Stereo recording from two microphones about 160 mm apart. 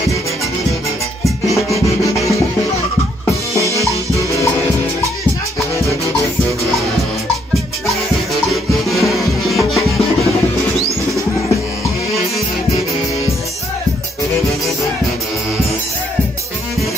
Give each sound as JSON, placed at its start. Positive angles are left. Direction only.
{"t": 2.1, "sound": "music", "side_deg": 20}
{"t": 8.3, "sound": "music", "side_deg": 0}